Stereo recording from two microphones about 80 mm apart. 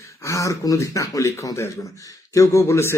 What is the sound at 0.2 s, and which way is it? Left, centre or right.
Speech, left.